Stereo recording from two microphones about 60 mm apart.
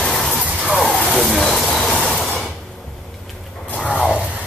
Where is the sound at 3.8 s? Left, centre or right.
Centre.